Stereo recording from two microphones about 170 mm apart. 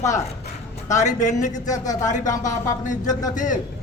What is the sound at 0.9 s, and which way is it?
Speech, 45° left (ahead or behind).